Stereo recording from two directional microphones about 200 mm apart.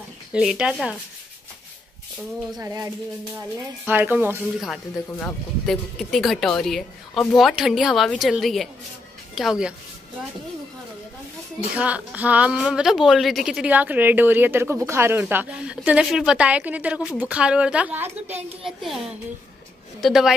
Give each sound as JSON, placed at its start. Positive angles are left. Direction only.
{"t": 0.3, "sound": "speech", "side_deg": -5}
{"t": 2.5, "sound": "a woman's voice", "side_deg": -15}
{"t": 11.7, "sound": "a woman's voice", "side_deg": -5}
{"t": 20.0, "sound": "speech", "side_deg": 0}